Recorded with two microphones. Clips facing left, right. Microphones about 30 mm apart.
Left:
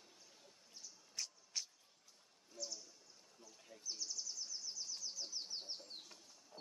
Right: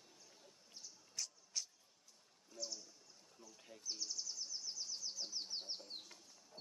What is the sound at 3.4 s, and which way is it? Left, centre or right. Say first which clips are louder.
Bird: right 1 dB; centre.